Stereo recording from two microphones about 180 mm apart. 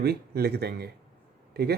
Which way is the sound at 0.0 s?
60° right (ahead or behind).